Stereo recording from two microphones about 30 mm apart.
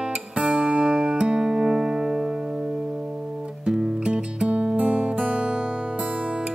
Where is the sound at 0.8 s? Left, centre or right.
Right.